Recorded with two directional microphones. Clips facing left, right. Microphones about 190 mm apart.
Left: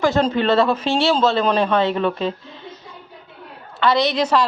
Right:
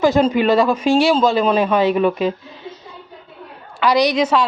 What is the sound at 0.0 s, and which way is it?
A woman's voice, 15° right (ahead or behind).